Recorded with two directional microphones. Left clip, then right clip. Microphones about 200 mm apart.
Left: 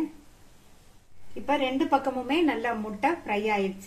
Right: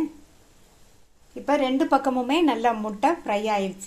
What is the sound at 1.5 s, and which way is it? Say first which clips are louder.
Speech: right 4 dB; 35° right (ahead or behind).